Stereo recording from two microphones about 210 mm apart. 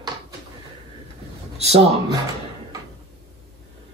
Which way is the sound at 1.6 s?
30° right (ahead or behind).